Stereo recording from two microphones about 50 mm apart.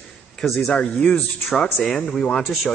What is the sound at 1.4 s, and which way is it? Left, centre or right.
Speech, centre.